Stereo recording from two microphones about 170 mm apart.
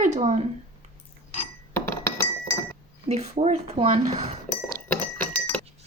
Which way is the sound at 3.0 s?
40° right (ahead or behind).